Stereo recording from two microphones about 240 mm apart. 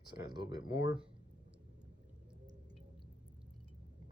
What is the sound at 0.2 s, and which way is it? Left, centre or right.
Speech, centre.